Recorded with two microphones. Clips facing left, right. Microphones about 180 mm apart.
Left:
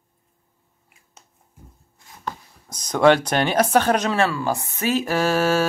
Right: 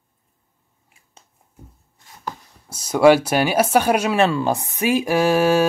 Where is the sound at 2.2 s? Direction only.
10° right (ahead or behind).